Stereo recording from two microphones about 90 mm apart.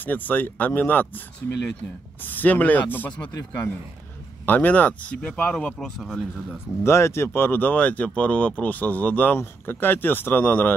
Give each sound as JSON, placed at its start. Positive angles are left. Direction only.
{"t": 0.0, "sound": "speech", "side_deg": 20}
{"t": 2.2, "sound": "speech", "side_deg": 20}
{"t": 6.8, "sound": "speech", "side_deg": 30}